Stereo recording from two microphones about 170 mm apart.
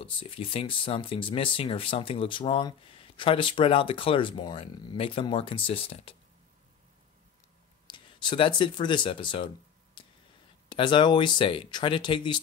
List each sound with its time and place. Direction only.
0.0 s speech: 30° left (ahead or behind)
7.8 s speech: 25° left (ahead or behind)
10.0 s a sound: 30° left (ahead or behind)
10.7 s speech: 25° left (ahead or behind)